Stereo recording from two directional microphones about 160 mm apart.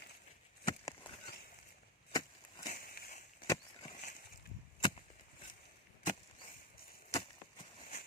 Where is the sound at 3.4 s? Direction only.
20° left (ahead or behind).